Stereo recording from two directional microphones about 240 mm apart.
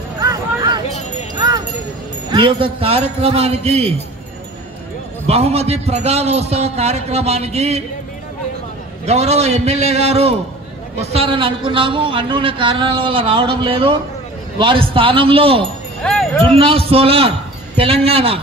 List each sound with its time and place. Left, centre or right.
0.2 s a sound: centre
1.3 s wind chime: centre
2.3 s a man's voice: right
5.2 s a man's voice: right
9.0 s a man's voice: right
16.0 s jingle bell: centre
16.5 s a man's voice: right